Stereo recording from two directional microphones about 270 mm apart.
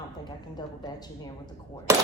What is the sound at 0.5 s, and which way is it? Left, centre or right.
Speech, centre.